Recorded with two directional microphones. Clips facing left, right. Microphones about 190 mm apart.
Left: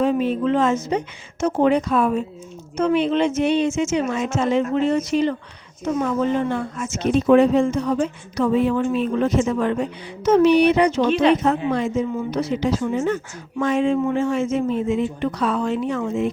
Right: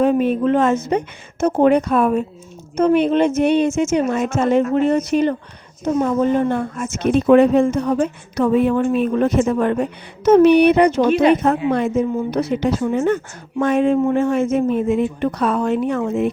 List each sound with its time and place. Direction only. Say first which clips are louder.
0.0 s a woman's voice: right 4 dB; 55° right (ahead or behind)
5.8 s speech: right 4 dB; 40° right (ahead or behind); by 11.0 s 55° right (ahead or behind)
11.0 s speech: right 1 dB; 10° right (ahead or behind)
11.4 s a woman's voice: right 3 dB; 60° right (ahead or behind)